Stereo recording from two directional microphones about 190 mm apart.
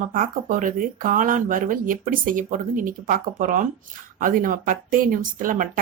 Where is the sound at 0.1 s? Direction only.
45° right (ahead or behind).